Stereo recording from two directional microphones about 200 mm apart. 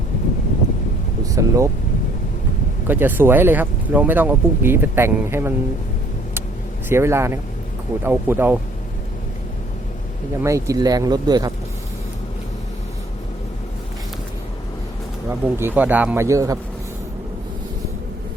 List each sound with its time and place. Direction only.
1.2 s speech: 15° right (ahead or behind)
2.8 s speech: 10° right (ahead or behind)
6.8 s speech: 15° right (ahead or behind)
10.4 s speech: 15° right (ahead or behind)
15.3 s speech: 10° right (ahead or behind)